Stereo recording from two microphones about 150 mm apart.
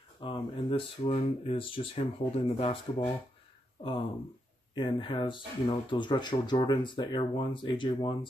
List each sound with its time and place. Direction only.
0.2 s speech: 35° left (ahead or behind)
4.7 s speech: 30° left (ahead or behind)